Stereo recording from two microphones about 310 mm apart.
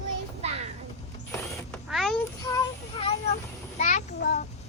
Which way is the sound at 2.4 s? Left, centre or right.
Centre.